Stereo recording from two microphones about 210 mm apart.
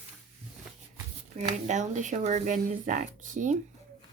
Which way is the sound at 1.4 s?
35° right (ahead or behind).